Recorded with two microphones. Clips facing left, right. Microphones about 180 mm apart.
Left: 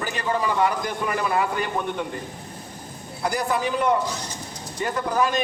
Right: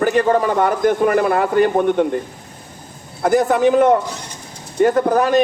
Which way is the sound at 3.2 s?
55° right (ahead or behind).